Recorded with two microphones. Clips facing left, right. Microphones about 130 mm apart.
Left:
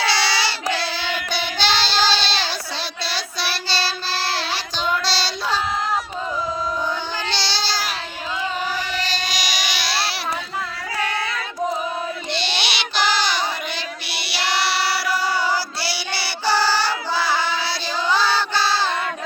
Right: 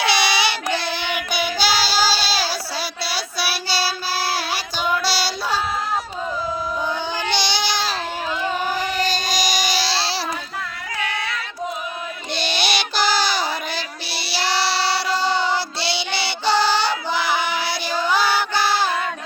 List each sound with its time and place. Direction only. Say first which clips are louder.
0.0 s child singing: right 2 dB; 15° right (ahead or behind)
7.3 s baby cry: right 4 dB; 15° right (ahead or behind)
9.0 s baby cry: right 4 dB; 45° right (ahead or behind); by 10.2 s 30° right (ahead or behind)
12.3 s a sound: right 6 dB; 45° right (ahead or behind)
14.1 s child singing: right 2 dB; 35° right (ahead or behind); by 18.9 s 15° right (ahead or behind)